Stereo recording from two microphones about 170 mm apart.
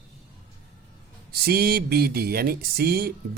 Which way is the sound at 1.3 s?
65° right (ahead or behind).